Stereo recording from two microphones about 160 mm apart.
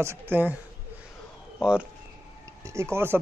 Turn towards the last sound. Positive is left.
turn(degrees=-15)  # may be behind; listen again after turning